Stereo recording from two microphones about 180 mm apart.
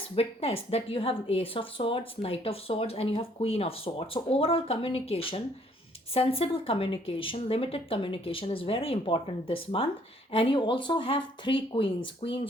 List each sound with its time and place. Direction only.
0.2 s a woman's voice: 35° left (ahead or behind)